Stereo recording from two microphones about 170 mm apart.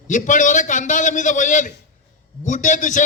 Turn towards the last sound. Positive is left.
turn(degrees=45)  # may be behind; listen again after turning